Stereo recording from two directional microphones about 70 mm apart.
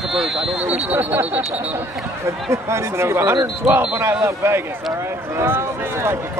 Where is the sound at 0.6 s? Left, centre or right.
Centre.